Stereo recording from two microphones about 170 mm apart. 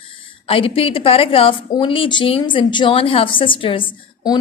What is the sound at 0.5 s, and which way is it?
A woman's voice, 35° left (ahead or behind).